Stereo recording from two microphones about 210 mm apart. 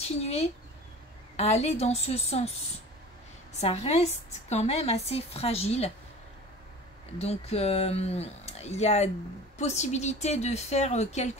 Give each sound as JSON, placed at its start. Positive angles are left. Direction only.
{"t": 0.0, "sound": "speech", "side_deg": 30}
{"t": 3.6, "sound": "a woman's voice", "side_deg": 30}
{"t": 7.2, "sound": "a woman's voice", "side_deg": 30}